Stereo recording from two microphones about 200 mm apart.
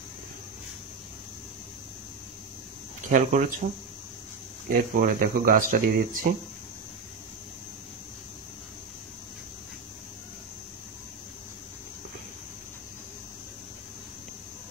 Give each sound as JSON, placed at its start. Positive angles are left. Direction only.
{"t": 3.0, "sound": "speech", "side_deg": -40}
{"t": 4.6, "sound": "speech", "side_deg": -45}